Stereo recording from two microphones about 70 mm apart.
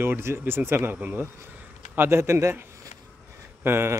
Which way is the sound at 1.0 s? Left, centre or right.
Centre.